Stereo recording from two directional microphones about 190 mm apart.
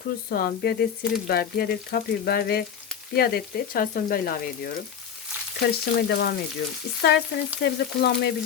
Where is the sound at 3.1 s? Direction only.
55° left (ahead or behind).